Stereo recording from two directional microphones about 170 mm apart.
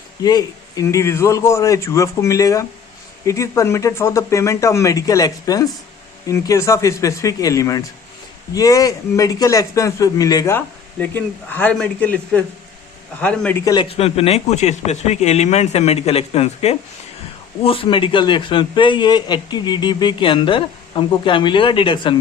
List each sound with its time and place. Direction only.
0.2 s a man's voice: 25° left (ahead or behind); by 13.6 s 5° left (ahead or behind)
13.8 s a man's voice: 35° left (ahead or behind)